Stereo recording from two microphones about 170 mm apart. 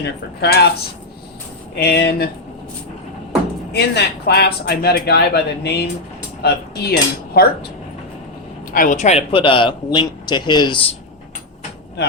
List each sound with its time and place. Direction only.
0.0 s speech: 80° left
1.8 s speech: 75° left (ahead or behind)
3.7 s speech: 80° left
8.7 s speech: 50° left (ahead or behind); by 10.8 s 25° left (ahead or behind)